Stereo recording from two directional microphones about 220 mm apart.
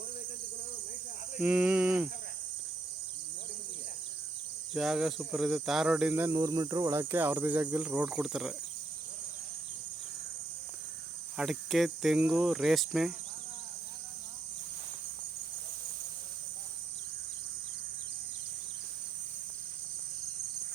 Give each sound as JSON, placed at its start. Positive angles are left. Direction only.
{"t": 1.4, "sound": "speech", "side_deg": -5}
{"t": 4.7, "sound": "speech", "side_deg": 0}
{"t": 11.3, "sound": "speech", "side_deg": 0}